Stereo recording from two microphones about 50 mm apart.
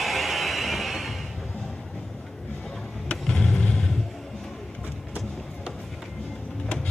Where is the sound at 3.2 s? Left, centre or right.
Centre.